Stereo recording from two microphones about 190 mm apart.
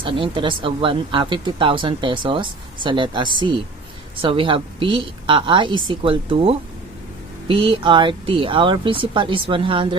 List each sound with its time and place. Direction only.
0.0 s speech: 30° right (ahead or behind)